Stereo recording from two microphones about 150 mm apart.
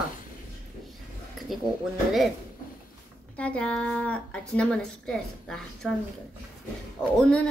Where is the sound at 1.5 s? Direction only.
Centre (ahead or behind).